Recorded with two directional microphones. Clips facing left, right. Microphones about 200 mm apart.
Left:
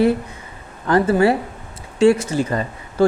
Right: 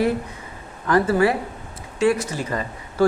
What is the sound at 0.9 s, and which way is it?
Speech, 30° left (ahead or behind).